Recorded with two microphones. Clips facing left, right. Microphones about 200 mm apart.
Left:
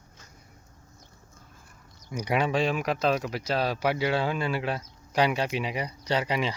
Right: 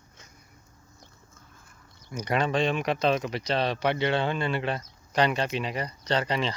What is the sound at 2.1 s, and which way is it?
Speech, 10° left (ahead or behind).